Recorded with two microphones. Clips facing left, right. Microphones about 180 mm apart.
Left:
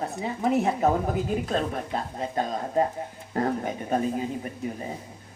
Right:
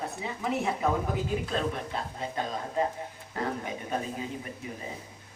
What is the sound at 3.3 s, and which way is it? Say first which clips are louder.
Speech: left 6 dB; 40° left (ahead or behind).